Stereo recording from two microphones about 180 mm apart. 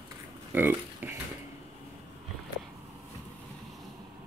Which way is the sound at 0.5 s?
10° right (ahead or behind).